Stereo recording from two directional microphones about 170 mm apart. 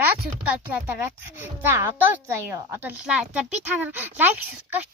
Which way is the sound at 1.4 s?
15° right (ahead or behind).